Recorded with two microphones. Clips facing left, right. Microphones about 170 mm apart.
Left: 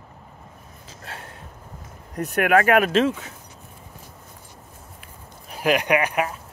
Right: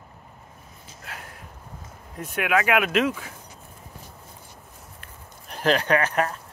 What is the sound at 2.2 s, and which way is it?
Speech, 40° left (ahead or behind).